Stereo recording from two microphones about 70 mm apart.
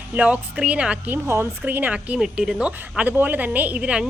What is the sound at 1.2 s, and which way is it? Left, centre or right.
Speech, right.